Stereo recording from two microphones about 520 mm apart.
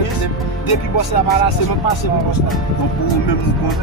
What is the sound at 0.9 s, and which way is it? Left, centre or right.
Speech, left.